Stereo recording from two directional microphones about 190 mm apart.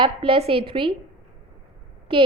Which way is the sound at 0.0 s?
30° right (ahead or behind).